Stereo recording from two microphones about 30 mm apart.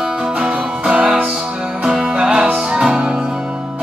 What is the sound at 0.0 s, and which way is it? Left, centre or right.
Music, right.